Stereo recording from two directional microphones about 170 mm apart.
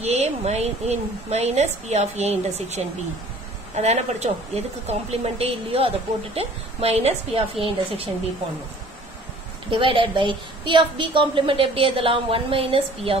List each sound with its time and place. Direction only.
0.0 s a woman's voice: 40° right (ahead or behind)
9.7 s a woman's voice: 30° right (ahead or behind)